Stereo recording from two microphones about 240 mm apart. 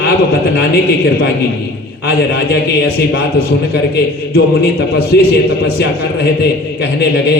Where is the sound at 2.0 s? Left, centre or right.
Left.